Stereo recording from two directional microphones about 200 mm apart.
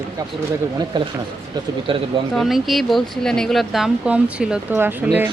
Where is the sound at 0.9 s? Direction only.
25° right (ahead or behind).